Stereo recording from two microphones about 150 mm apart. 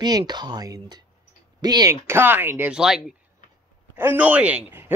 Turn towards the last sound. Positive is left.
turn(degrees=-15)  # may be behind; listen again after turning